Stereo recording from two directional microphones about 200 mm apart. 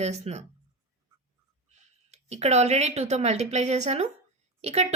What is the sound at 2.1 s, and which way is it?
A woman's voice, 35° right (ahead or behind).